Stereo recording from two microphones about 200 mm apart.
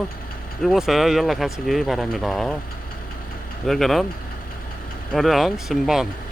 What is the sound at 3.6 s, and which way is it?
Speech, centre (ahead or behind).